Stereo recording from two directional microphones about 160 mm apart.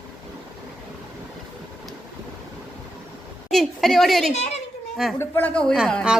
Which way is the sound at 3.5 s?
Centre (ahead or behind).